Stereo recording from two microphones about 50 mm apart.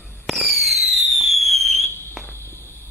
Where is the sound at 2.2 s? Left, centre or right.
Left.